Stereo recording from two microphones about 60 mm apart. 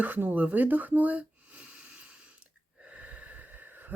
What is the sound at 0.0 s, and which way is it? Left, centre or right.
Speech, right.